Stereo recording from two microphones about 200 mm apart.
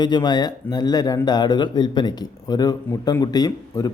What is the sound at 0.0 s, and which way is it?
A man's voice, 20° left (ahead or behind).